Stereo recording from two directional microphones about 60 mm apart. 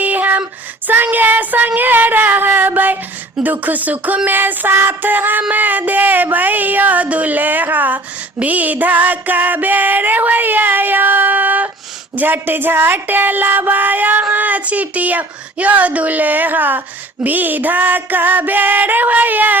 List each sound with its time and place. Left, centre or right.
0.0 s female singing: right
0.9 s child singing: right
3.4 s a woman's voice: right